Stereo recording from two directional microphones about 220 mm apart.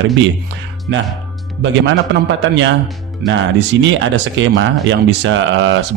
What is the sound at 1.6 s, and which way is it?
A man's voice, 55° right (ahead or behind).